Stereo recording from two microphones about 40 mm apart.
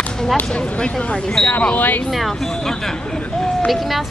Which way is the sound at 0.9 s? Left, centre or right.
Centre.